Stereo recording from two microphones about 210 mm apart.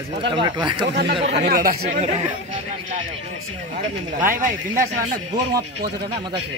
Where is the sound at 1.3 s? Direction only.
50° right (ahead or behind).